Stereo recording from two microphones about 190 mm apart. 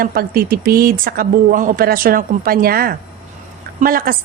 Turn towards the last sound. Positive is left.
turn(degrees=-50)  # may be behind; listen again after turning